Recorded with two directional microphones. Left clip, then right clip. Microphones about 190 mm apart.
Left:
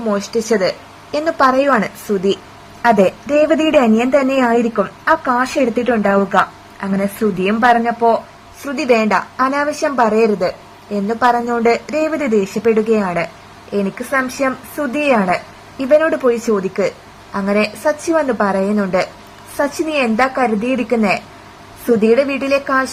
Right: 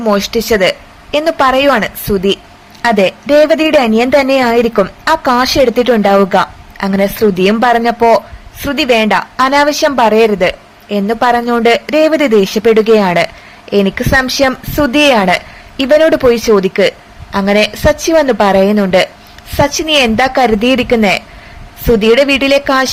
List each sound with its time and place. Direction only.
0.0 s a woman's voice: 15° right (ahead or behind)
2.8 s speech: 20° right (ahead or behind)
8.7 s a woman's voice: 10° right (ahead or behind)
9.0 s a woman's voice: 20° right (ahead or behind)
22.3 s speech: 20° right (ahead or behind)